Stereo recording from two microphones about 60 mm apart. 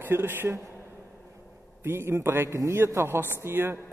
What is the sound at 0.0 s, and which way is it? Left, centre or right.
Speech, right.